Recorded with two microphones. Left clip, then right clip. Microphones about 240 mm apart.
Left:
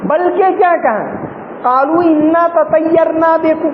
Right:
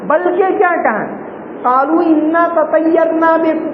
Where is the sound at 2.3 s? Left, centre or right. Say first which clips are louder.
Left 1 dB; left.